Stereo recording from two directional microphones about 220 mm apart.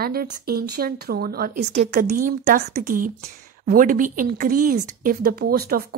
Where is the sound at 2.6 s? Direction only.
30° right (ahead or behind).